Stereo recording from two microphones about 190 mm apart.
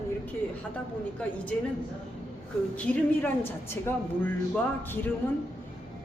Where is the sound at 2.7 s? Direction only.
5° left (ahead or behind).